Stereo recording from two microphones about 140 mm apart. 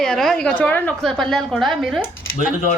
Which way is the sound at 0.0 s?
5° left (ahead or behind).